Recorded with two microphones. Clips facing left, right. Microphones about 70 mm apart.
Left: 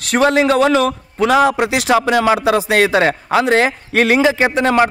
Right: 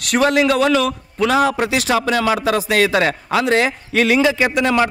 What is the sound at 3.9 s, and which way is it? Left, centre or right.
Speech, left.